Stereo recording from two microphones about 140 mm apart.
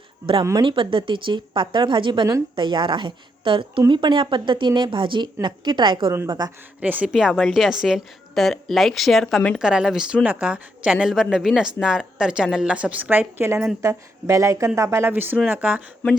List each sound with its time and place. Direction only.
0.4 s speech: 30° right (ahead or behind)
6.1 s speech: 25° right (ahead or behind)
6.7 s a woman's voice: 10° right (ahead or behind); by 9.6 s 5° left (ahead or behind)
9.6 s a woman's voice: 5° right (ahead or behind)